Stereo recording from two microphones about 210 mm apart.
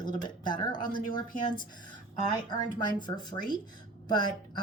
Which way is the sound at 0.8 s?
40° left (ahead or behind).